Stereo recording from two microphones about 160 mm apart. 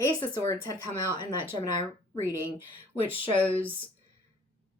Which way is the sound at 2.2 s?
15° right (ahead or behind).